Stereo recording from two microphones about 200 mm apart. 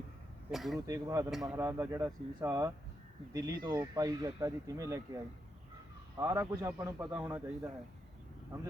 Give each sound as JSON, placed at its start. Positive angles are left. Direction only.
{"t": 0.5, "sound": "speech", "side_deg": 0}
{"t": 0.9, "sound": "speech", "side_deg": -15}
{"t": 1.3, "sound": "speech", "side_deg": 0}
{"t": 1.5, "sound": "speech", "side_deg": -15}
{"t": 7.0, "sound": "speech", "side_deg": -5}